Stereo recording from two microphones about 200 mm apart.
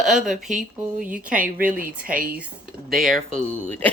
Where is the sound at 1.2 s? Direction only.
40° right (ahead or behind).